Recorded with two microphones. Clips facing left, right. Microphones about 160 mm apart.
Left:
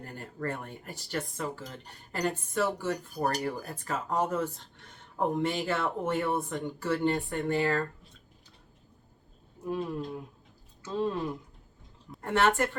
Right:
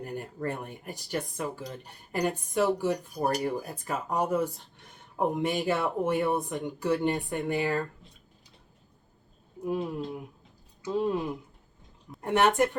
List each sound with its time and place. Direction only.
0.0 s speech: 15° right (ahead or behind)
9.6 s speech: 15° right (ahead or behind)